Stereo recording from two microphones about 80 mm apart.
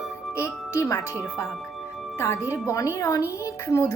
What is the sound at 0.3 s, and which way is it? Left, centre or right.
A woman's voice, left.